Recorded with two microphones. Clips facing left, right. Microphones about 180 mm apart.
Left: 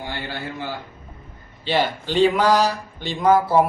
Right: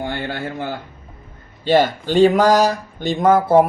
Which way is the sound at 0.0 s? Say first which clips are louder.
Right 6 dB; 55° right (ahead or behind).